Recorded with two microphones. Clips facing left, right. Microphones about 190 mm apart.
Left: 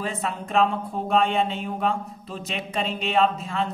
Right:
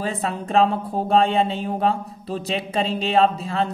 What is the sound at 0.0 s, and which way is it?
Speech, 35° right (ahead or behind).